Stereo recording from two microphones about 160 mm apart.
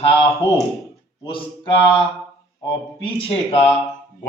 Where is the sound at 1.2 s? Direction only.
35° left (ahead or behind).